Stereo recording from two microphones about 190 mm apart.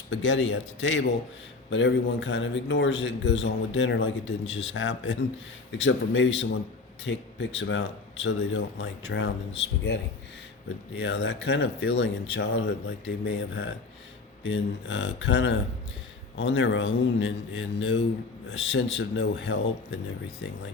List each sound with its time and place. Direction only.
0.1 s a man's voice: 75° left (ahead or behind)